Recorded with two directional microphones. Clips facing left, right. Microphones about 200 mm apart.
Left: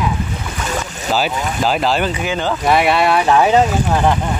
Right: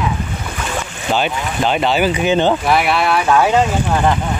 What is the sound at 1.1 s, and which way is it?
Speech, centre (ahead or behind).